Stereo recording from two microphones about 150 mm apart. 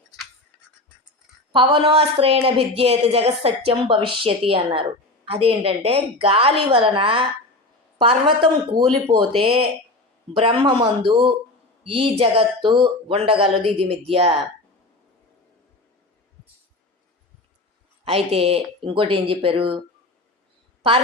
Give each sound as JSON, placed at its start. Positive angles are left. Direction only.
{"t": 1.5, "sound": "a woman's voice", "side_deg": -35}
{"t": 18.0, "sound": "a woman's voice", "side_deg": -40}